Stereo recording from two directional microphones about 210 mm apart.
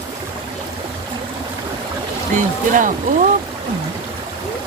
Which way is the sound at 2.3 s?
40° right (ahead or behind).